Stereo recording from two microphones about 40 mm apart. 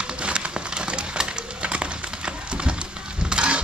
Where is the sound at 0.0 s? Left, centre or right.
Right.